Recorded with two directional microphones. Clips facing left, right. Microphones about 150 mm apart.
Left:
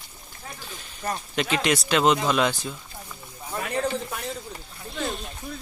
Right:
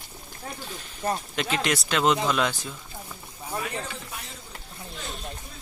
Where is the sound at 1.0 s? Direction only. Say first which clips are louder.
Right 2 dB; 25° right (ahead or behind).